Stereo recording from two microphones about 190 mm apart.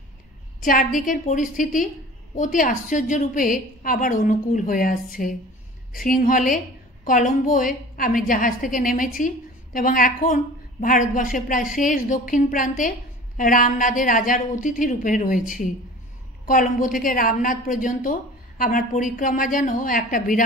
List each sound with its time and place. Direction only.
0.6 s a woman's voice: 45° left (ahead or behind)